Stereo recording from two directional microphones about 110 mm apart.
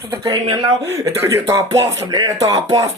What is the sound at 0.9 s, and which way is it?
Speech, 25° right (ahead or behind).